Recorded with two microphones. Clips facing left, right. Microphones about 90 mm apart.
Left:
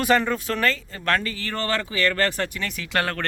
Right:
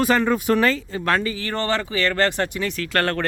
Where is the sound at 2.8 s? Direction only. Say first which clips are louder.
Right 2 dB; 15° left (ahead or behind).